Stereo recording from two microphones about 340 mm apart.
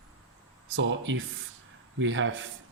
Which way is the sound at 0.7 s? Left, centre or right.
Right.